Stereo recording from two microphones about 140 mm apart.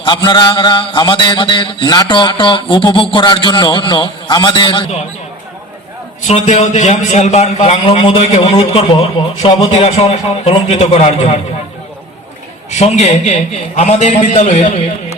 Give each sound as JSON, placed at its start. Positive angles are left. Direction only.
{"t": 0.0, "sound": "mantra", "side_deg": 35}
{"t": 6.2, "sound": "a man's voice", "side_deg": 50}
{"t": 9.6, "sound": "a man's voice", "side_deg": 50}
{"t": 12.7, "sound": "a man's voice", "side_deg": 50}